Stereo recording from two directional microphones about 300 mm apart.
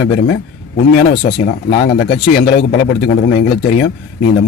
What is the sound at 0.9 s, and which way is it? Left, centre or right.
Speech, left.